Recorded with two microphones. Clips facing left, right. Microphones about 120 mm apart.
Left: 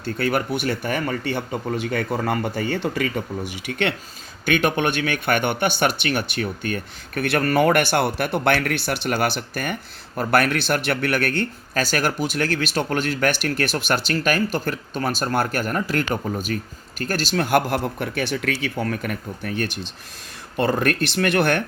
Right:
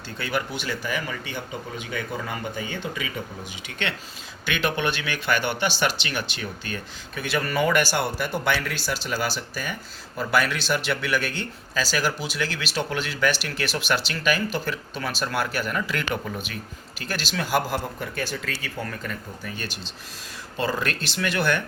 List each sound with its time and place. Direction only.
0.0 s speech: 50° left (ahead or behind)